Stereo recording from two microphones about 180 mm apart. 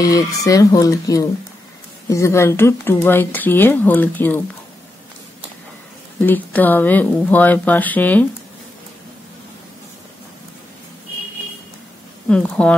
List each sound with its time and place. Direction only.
0.0 s speech: 20° left (ahead or behind)
6.2 s speech: 10° left (ahead or behind)
12.3 s speech: 5° left (ahead or behind)